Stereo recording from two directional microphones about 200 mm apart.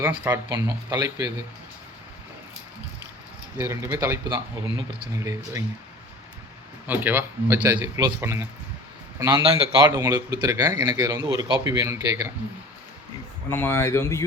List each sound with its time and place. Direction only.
0.0 s a man's voice: 10° right (ahead or behind)
3.6 s a man's voice: 10° right (ahead or behind)
6.8 s a man's voice: 10° right (ahead or behind)
11.7 s a man's voice: 15° right (ahead or behind)
13.5 s speech: 10° left (ahead or behind)